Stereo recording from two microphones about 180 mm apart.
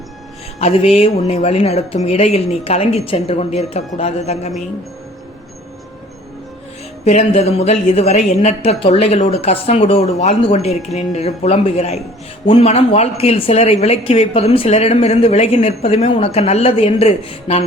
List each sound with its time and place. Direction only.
0.6 s speech: 35° left (ahead or behind)
7.0 s speech: 35° left (ahead or behind)